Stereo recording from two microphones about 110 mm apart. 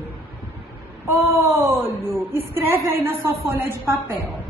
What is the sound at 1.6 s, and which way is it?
A woman's voice, 20° right (ahead or behind).